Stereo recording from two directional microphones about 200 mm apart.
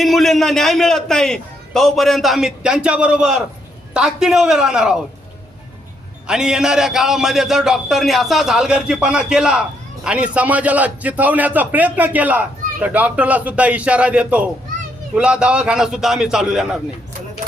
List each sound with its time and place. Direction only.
0.0 s a man's voice: centre (ahead or behind)
6.2 s a man's voice: 5° right (ahead or behind)